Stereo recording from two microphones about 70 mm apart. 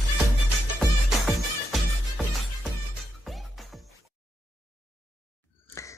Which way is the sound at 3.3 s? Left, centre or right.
Centre.